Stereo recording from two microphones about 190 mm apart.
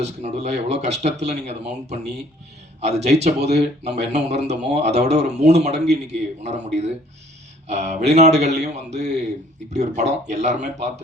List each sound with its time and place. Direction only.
0.0 s a man's voice: 35° right (ahead or behind)